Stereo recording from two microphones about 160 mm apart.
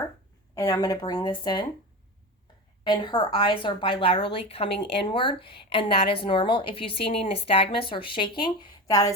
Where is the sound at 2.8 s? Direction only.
30° left (ahead or behind).